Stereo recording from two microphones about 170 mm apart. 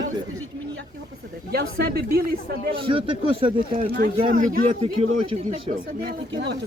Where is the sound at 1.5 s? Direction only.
65° right (ahead or behind).